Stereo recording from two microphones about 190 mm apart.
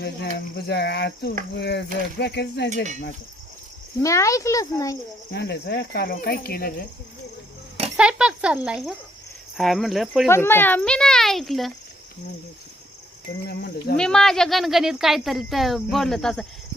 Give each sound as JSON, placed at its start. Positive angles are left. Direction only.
{"t": 0.0, "sound": "speech", "side_deg": 55}
{"t": 4.0, "sound": "speech", "side_deg": 15}
{"t": 5.3, "sound": "speech", "side_deg": 60}
{"t": 7.9, "sound": "speech", "side_deg": -5}
{"t": 10.2, "sound": "speech", "side_deg": 15}
{"t": 13.5, "sound": "speech", "side_deg": 55}
{"t": 13.9, "sound": "speech", "side_deg": 5}